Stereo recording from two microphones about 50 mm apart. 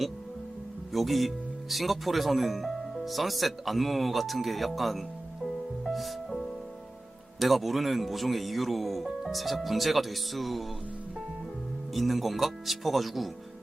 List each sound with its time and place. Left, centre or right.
0.9 s speech: centre
5.8 s music: centre
7.3 s speech: centre
11.9 s speech: centre